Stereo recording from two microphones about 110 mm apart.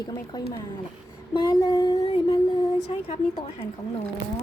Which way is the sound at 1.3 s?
50° left (ahead or behind).